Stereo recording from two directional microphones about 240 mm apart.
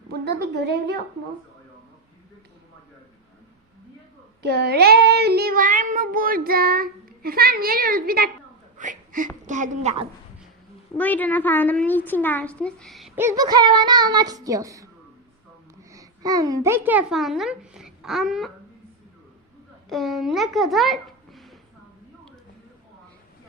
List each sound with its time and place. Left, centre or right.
0.1 s a woman's voice: right
4.4 s child singing: right
8.8 s speech: right
10.9 s a child's voice: centre
15.9 s a child's voice: centre
19.9 s a child's voice: centre